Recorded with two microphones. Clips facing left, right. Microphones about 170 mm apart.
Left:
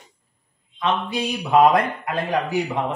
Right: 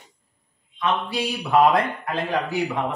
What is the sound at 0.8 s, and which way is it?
Speech, 20° left (ahead or behind).